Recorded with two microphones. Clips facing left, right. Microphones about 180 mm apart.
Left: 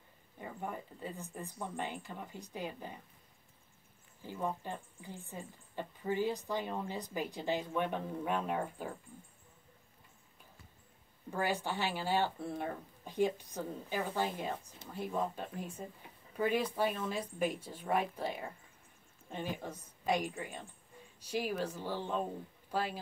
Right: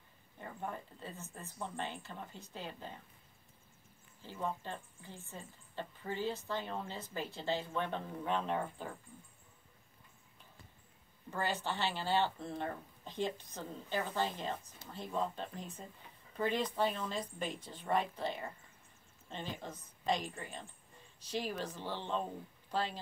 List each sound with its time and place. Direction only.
0.4 s a woman's voice: 10° left (ahead or behind)
4.2 s a woman's voice: 15° left (ahead or behind)
11.2 s a woman's voice: 10° left (ahead or behind)